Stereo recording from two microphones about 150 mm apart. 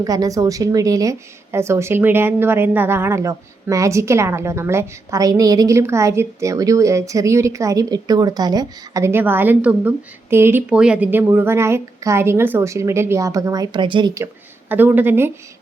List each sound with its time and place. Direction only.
0.0 s a woman's voice: 25° right (ahead or behind)
14.7 s speech: 15° right (ahead or behind)